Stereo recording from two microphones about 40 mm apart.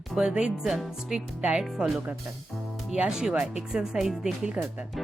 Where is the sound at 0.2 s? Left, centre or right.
Right.